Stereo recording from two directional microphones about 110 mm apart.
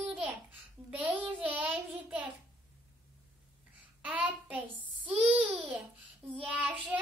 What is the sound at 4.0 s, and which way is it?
Child singing, 15° right (ahead or behind).